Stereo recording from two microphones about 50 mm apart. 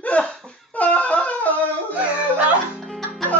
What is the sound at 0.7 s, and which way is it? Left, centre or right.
Shofar, left.